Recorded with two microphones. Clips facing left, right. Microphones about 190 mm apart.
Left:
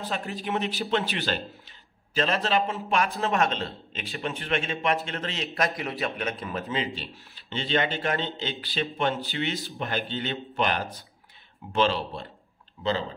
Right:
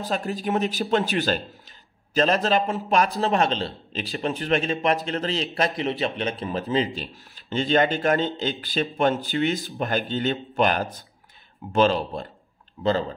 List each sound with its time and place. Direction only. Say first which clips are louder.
0.0 s a man's voice: right 5 dB; 40° right (ahead or behind)